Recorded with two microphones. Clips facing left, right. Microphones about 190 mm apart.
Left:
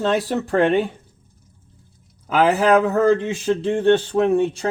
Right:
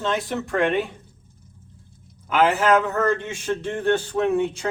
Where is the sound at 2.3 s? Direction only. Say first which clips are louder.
Left 3 dB; 35° left (ahead or behind).